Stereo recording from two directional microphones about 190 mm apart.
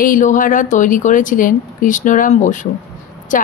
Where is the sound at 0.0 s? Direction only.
45° left (ahead or behind).